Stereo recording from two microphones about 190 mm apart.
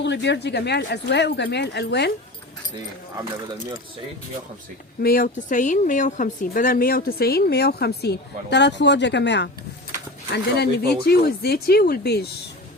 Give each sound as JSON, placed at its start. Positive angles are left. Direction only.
{"t": 0.0, "sound": "speech", "side_deg": 65}
{"t": 5.0, "sound": "speech", "side_deg": 50}